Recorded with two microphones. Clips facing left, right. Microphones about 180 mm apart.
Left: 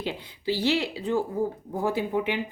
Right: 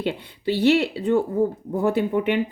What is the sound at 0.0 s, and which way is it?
A woman's voice, 60° right (ahead or behind).